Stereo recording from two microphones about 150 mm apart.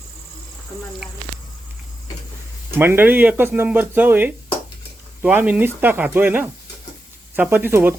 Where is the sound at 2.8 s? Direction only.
15° right (ahead or behind).